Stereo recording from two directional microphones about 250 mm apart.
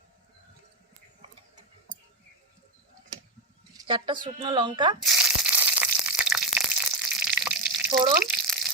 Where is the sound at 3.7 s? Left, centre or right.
Centre.